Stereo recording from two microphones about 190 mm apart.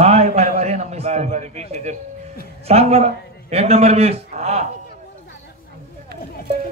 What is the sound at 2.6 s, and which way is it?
A man's voice, 35° right (ahead or behind).